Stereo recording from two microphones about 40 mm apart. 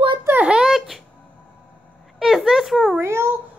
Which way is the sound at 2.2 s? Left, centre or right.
Centre.